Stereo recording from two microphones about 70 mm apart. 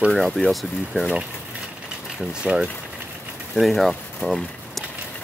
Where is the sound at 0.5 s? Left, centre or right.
Centre.